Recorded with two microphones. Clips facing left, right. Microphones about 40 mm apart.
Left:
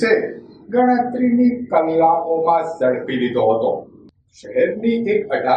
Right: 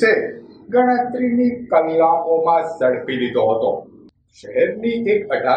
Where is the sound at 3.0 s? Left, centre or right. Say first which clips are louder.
Even; centre.